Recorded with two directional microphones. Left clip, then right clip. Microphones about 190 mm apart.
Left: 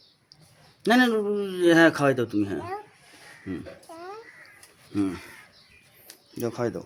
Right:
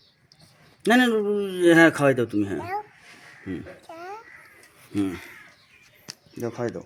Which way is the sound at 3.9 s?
10° left (ahead or behind).